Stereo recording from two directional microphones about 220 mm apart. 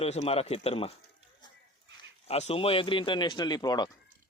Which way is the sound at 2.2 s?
30° left (ahead or behind).